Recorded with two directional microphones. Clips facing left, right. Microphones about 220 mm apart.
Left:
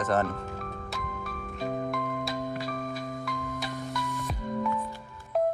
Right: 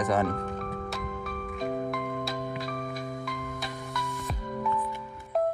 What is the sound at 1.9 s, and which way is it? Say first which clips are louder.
Music: even; centre (ahead or behind).